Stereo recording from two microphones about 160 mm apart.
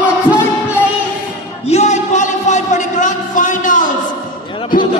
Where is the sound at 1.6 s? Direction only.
45° left (ahead or behind).